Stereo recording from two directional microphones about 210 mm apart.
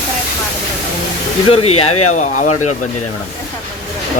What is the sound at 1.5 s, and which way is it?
Speech, 30° left (ahead or behind).